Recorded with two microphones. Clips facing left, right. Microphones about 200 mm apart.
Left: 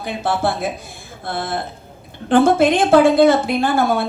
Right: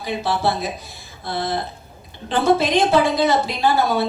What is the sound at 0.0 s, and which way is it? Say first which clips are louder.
Speech: left 1 dB; 50° left (ahead or behind).